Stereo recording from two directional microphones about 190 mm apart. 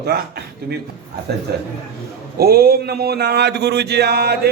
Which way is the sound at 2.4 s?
55° right (ahead or behind).